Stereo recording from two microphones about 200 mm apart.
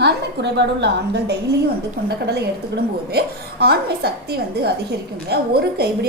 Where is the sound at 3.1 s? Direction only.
55° right (ahead or behind).